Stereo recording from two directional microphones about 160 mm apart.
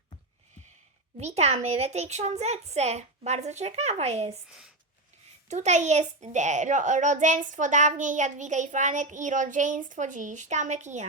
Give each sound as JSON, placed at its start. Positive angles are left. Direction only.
{"t": 1.2, "sound": "a child's voice", "side_deg": -40}
{"t": 4.4, "sound": "speech", "side_deg": -5}
{"t": 5.5, "sound": "a child's voice", "side_deg": -45}